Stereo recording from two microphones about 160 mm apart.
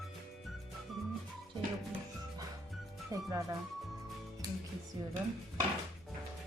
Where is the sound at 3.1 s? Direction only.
20° right (ahead or behind).